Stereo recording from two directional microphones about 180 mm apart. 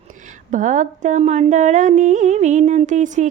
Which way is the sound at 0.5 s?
45° right (ahead or behind).